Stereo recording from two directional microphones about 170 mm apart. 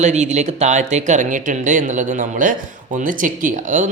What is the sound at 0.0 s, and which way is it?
A man's voice, 45° right (ahead or behind).